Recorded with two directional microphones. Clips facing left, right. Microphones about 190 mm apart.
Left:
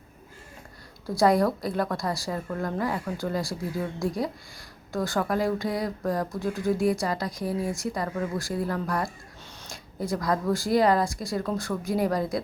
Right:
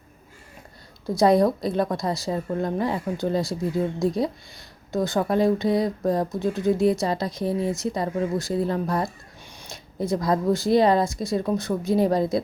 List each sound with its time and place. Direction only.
1.0 s speech: 20° right (ahead or behind)